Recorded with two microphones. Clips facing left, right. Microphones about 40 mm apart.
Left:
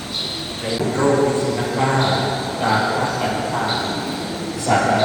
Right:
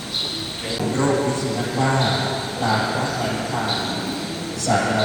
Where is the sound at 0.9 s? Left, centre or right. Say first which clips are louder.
Left 4 dB; centre.